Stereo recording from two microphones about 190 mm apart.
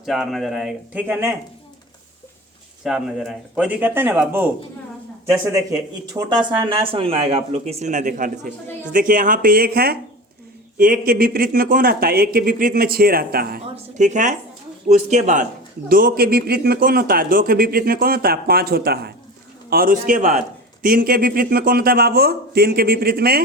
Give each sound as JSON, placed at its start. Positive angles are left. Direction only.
{"t": 0.0, "sound": "speech", "side_deg": 0}
{"t": 2.8, "sound": "speech", "side_deg": 0}
{"t": 6.7, "sound": "a man's voice", "side_deg": -30}
{"t": 13.7, "sound": "a man's voice", "side_deg": -40}